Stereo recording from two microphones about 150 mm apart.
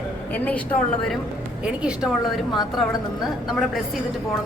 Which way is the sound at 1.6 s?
5° right (ahead or behind).